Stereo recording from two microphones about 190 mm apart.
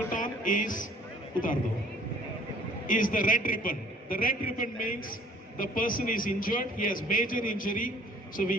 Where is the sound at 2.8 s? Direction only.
45° left (ahead or behind).